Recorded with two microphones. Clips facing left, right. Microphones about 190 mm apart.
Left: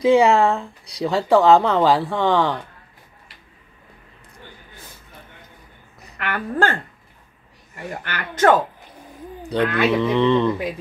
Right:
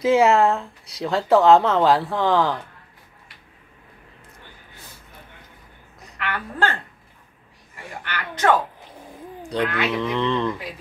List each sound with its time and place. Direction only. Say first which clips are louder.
0.0 s speech: left 2 dB; 5° right (ahead or behind)
6.1 s a woman's voice: left 5 dB; 45° left (ahead or behind)
7.7 s speech: left 3 dB; 45° left (ahead or behind)
9.5 s speech: left 5 dB; centre (ahead or behind)